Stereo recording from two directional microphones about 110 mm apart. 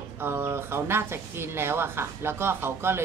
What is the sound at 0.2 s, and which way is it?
Speech, 20° right (ahead or behind).